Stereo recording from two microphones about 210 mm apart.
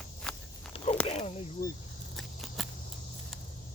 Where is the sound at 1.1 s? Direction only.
30° left (ahead or behind).